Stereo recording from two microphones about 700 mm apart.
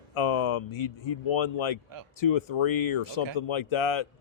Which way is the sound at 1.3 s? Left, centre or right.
Left.